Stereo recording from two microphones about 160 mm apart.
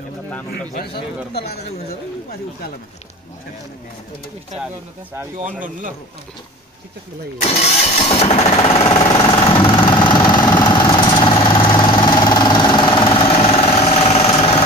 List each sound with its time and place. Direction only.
0.5 s a man's voice: 80° left
7.5 s music: 40° left (ahead or behind)
8.5 s vehicle: 35° left (ahead or behind)